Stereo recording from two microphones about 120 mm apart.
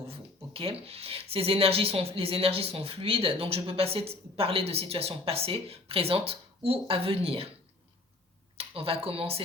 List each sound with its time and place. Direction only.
0.1 s speech: 55° right (ahead or behind)
8.5 s speech: 55° right (ahead or behind)